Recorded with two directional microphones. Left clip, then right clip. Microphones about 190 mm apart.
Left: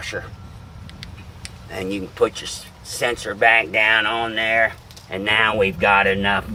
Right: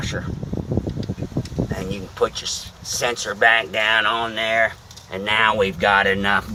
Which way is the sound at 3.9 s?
Centre (ahead or behind).